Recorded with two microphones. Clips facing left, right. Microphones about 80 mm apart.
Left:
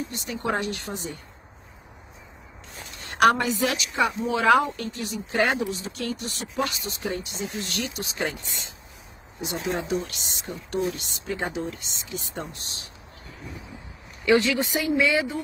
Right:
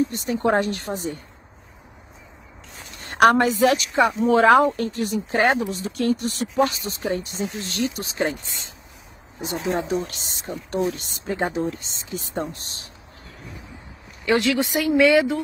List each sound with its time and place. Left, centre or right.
0.1 s speech: right
3.0 s a woman's voice: right
14.4 s speech: right